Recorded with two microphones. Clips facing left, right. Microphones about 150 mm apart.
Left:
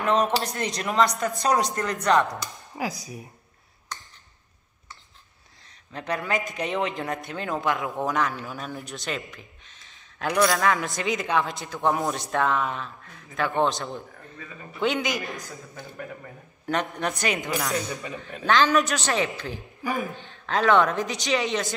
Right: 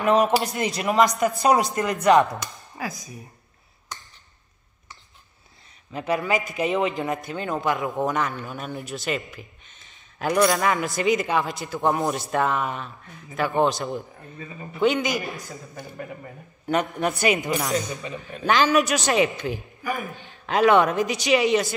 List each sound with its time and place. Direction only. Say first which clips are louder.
0.0 s speech: right 3 dB; 5° right (ahead or behind)
2.8 s speech: left 2 dB; 15° left (ahead or behind)
5.9 s a man's voice: right 4 dB; 5° right (ahead or behind)
16.6 s speech: right 3 dB; 5° right (ahead or behind)
18.3 s a man's voice: even; centre (ahead or behind)
18.8 s speech: right 4 dB; 15° right (ahead or behind)